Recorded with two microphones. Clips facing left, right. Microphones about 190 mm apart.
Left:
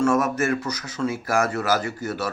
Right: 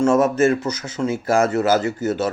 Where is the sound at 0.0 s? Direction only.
25° right (ahead or behind).